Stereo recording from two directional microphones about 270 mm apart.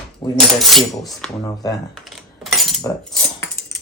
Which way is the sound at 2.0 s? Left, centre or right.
Centre.